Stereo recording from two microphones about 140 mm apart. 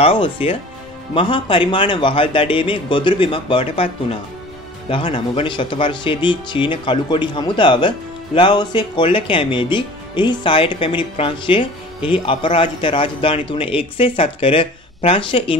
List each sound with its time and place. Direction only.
0.0 s speech: 40° left (ahead or behind)